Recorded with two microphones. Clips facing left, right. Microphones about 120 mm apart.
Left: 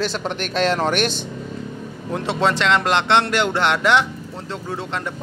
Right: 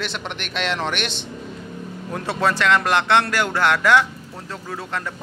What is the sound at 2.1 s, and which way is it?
Speech, 25° left (ahead or behind).